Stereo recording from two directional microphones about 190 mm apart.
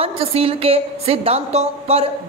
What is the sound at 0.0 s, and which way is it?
A woman's voice, 30° right (ahead or behind).